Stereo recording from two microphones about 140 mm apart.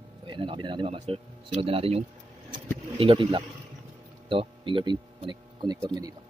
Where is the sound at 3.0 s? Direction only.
40° right (ahead or behind).